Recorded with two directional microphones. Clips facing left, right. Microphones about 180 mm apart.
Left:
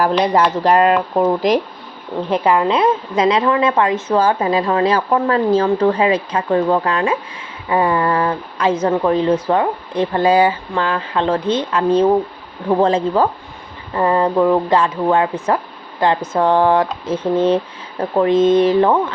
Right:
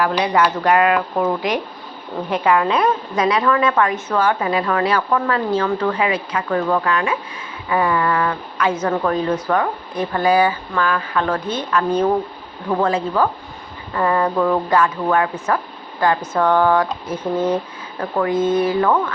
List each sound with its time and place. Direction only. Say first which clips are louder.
0.6 s a woman's voice: left 2 dB; 30° left (ahead or behind)